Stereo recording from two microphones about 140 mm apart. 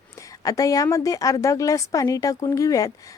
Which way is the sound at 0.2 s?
25° left (ahead or behind).